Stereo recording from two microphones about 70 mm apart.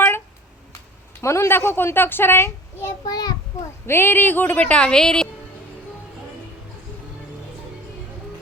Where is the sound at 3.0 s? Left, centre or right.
Left.